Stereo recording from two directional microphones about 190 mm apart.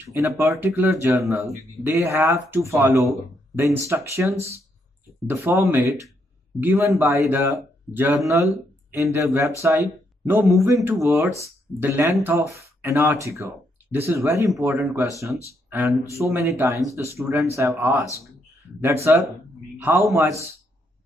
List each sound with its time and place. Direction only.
0.4 s speech: 15° right (ahead or behind)
19.8 s a man's voice: 5° right (ahead or behind)